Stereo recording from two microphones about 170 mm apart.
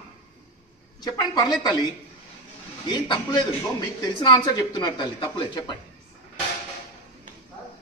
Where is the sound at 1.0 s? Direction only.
25° left (ahead or behind).